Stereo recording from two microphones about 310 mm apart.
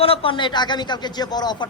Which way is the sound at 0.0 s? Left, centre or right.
Centre.